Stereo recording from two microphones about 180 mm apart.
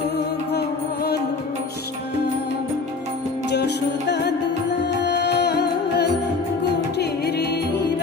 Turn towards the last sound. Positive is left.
turn(degrees=70)  # may be behind; listen again after turning